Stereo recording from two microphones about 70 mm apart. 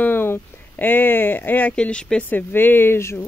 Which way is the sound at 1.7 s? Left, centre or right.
Centre.